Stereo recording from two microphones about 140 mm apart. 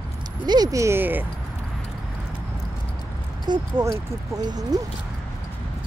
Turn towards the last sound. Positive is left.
turn(degrees=-25)  # may be behind; listen again after turning